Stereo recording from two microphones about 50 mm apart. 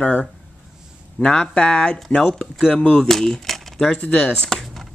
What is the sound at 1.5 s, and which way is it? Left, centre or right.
Speech, left.